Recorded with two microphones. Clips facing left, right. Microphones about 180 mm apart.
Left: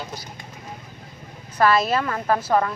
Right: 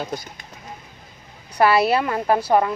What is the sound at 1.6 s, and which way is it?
A woman's voice, 15° right (ahead or behind).